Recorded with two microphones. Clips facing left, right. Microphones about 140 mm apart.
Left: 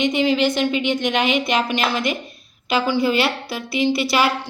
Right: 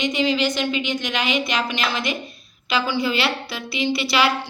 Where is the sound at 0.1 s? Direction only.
55° left (ahead or behind).